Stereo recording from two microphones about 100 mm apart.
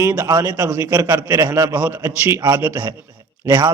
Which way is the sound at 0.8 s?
30° right (ahead or behind).